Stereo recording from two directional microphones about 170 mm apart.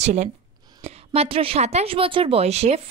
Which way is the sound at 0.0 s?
45° right (ahead or behind).